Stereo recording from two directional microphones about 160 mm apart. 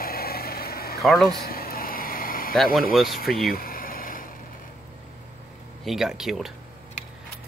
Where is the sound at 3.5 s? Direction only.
65° left (ahead or behind).